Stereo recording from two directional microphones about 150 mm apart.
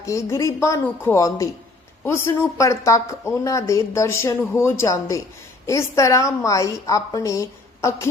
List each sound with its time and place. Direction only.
0.0 s speech: 20° left (ahead or behind)